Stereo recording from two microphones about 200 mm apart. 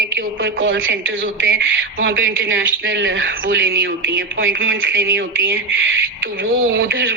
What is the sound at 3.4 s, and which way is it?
A woman's voice, 50° right (ahead or behind).